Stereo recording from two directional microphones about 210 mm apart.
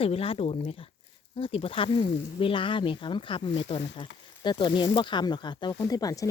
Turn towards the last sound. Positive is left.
turn(degrees=15)  # may be behind; listen again after turning